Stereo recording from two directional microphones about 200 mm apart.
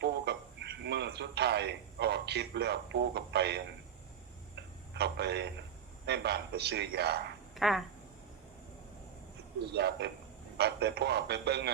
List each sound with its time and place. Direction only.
0.0 s speech: 55° right (ahead or behind)
4.5 s a sound: 55° right (ahead or behind)
6.1 s a man's voice: 55° right (ahead or behind)
7.5 s speech: centre (ahead or behind)
9.7 s a man's voice: 55° right (ahead or behind)